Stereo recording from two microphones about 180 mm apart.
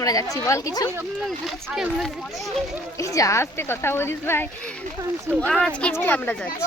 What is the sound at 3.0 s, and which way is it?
A woman's voice, 20° left (ahead or behind).